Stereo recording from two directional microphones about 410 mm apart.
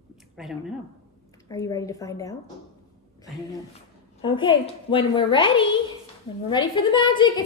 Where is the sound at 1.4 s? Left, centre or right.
Centre.